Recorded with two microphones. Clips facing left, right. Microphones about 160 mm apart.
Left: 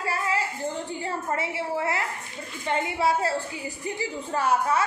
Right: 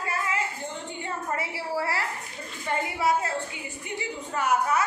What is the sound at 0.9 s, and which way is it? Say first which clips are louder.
A woman's voice: left 3 dB; 35° left (ahead or behind).